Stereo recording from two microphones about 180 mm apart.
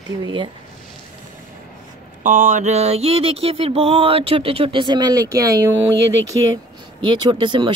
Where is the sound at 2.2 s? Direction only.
50° right (ahead or behind); by 5.5 s 20° right (ahead or behind).